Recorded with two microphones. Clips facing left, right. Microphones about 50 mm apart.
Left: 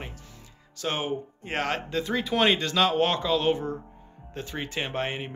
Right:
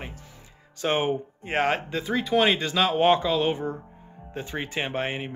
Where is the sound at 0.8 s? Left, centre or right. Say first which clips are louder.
Right 5 dB; right.